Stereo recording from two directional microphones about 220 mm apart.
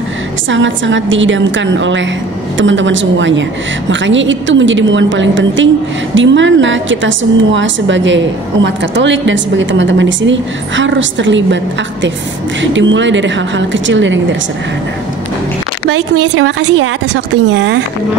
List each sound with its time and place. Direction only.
0.5 s a woman's voice: 60° right (ahead or behind)
16.3 s a woman's voice: 55° right (ahead or behind)